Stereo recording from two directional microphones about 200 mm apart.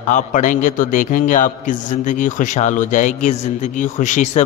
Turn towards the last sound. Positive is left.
turn(degrees=35)  # may be behind; listen again after turning